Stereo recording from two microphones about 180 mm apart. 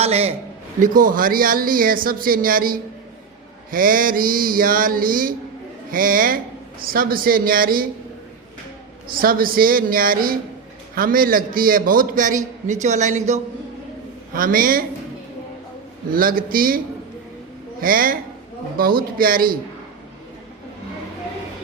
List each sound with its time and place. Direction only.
0.0 s a man's voice: 35° right (ahead or behind)
0.8 s speech: 50° right (ahead or behind)
9.1 s a man's voice: 55° right (ahead or behind)
14.3 s speech: 50° right (ahead or behind)
16.0 s a woman's voice: 50° right (ahead or behind)